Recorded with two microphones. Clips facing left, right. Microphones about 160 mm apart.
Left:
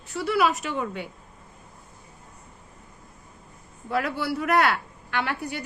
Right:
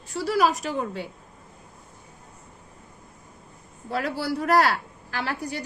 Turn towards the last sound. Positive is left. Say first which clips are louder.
# left 1 dB
turn(degrees=-35)  # may be behind; listen again after turning